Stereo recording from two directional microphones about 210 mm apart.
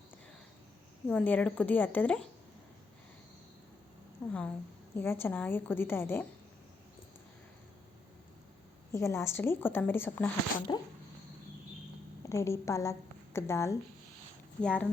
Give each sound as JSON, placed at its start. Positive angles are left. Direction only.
{"t": 1.0, "sound": "a woman's voice", "side_deg": 5}
{"t": 4.3, "sound": "a woman's voice", "side_deg": 5}
{"t": 8.9, "sound": "a woman's voice", "side_deg": 15}
{"t": 12.2, "sound": "a woman's voice", "side_deg": 15}